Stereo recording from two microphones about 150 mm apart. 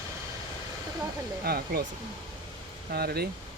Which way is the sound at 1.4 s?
90° right.